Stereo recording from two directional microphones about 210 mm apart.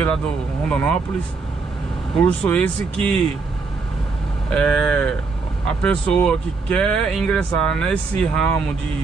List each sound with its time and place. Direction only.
0.7 s speech: 5° left (ahead or behind)
2.1 s speech: 5° left (ahead or behind)
4.5 s speech: 5° left (ahead or behind)